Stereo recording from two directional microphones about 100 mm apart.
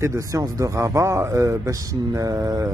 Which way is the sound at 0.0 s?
30° right (ahead or behind).